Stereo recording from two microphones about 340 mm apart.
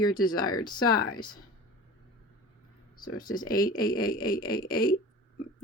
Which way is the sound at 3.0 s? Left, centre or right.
Centre.